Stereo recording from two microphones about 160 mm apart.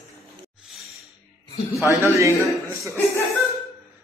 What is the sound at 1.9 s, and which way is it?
Speech, 20° right (ahead or behind).